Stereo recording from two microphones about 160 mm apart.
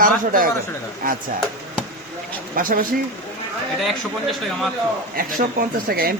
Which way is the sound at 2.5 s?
60° right (ahead or behind).